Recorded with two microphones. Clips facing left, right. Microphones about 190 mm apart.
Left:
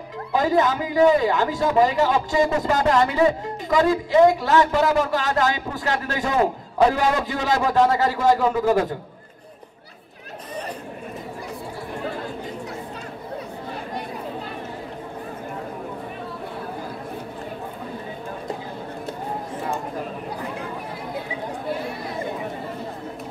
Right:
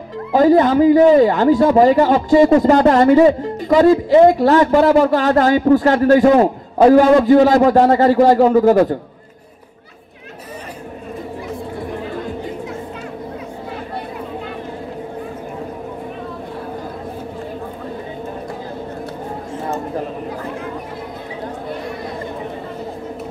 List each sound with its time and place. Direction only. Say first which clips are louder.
0.3 s a man's voice: right 8 dB; 45° right (ahead or behind)